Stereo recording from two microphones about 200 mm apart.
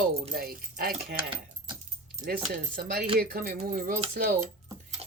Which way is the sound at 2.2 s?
50° right (ahead or behind).